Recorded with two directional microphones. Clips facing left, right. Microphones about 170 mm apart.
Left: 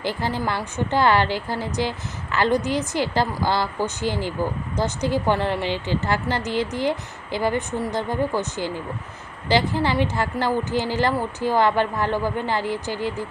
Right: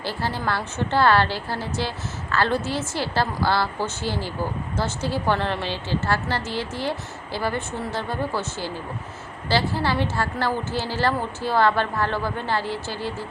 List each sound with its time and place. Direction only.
0.0 s a woman's voice: 15° left (ahead or behind)